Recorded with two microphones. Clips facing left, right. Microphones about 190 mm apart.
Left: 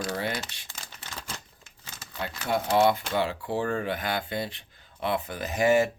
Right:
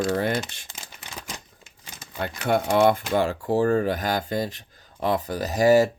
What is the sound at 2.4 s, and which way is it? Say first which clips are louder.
Speech: right 3 dB; 65° right (ahead or behind).